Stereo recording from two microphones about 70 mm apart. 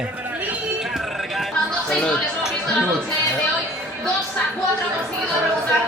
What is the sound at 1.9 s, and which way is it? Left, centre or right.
Speech, centre.